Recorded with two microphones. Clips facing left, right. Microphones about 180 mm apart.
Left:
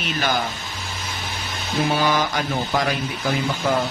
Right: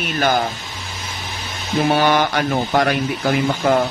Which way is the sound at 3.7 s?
75° right (ahead or behind).